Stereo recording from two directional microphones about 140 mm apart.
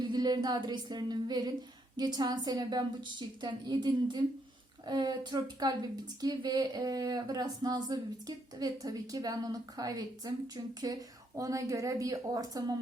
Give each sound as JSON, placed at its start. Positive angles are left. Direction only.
{"t": 0.0, "sound": "a woman's voice", "side_deg": -30}